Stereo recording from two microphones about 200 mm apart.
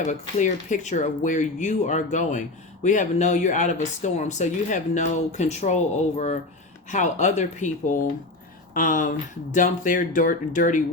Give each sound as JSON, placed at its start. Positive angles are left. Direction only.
{"t": 0.0, "sound": "speech", "side_deg": 35}